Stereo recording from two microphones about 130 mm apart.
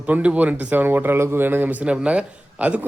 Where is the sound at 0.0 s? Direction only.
10° right (ahead or behind).